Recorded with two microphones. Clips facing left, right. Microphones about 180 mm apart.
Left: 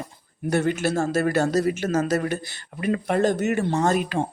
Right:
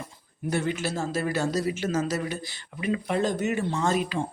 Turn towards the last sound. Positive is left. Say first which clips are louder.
# left 4 dB
turn(degrees=55)  # may be behind; listen again after turning